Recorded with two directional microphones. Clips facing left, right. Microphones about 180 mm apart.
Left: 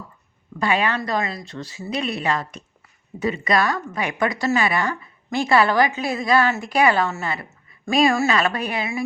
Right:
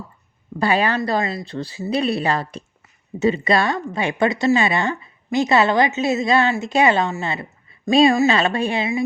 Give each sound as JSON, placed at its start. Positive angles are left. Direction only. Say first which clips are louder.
{"t": 0.6, "sound": "speech", "louder": "right 3 dB", "side_deg": -35}